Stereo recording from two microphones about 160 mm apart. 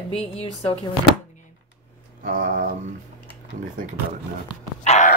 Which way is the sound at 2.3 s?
50° right (ahead or behind).